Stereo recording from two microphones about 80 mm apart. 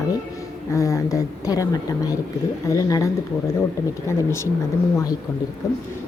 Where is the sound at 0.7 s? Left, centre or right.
Left.